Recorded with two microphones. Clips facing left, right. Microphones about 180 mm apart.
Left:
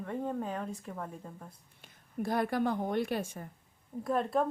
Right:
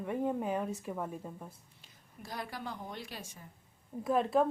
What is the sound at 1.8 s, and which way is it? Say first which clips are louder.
A woman's voice: left 16 dB; 55° left (ahead or behind).